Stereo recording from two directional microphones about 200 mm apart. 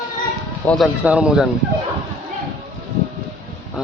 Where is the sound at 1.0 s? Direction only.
5° right (ahead or behind).